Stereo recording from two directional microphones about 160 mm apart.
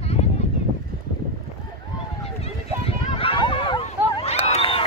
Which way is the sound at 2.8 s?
35° left (ahead or behind).